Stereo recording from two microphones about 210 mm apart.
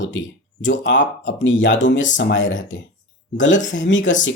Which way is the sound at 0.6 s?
60° left (ahead or behind).